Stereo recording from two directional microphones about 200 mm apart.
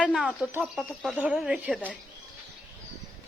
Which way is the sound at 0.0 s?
5° right (ahead or behind).